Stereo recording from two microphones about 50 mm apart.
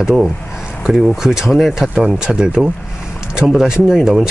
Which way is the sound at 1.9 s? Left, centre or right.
Centre.